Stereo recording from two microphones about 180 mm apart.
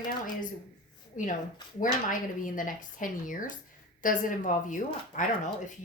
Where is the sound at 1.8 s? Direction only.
50° left (ahead or behind).